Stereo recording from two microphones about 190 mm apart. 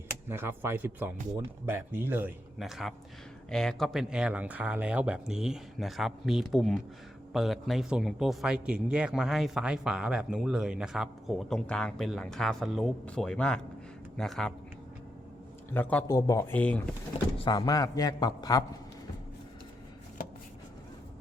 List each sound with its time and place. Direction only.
0.3 s speech: 10° right (ahead or behind)
15.7 s speech: 10° left (ahead or behind)
16.0 s speech: 20° left (ahead or behind)
17.3 s a man's voice: 25° left (ahead or behind)